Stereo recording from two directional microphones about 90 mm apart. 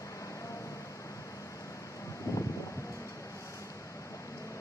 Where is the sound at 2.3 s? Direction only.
40° left (ahead or behind).